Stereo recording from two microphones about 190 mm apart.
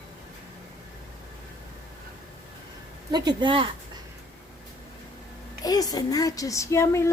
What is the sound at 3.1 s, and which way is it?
Speech, 25° right (ahead or behind).